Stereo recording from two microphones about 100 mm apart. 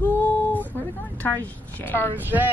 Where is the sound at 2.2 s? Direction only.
20° right (ahead or behind).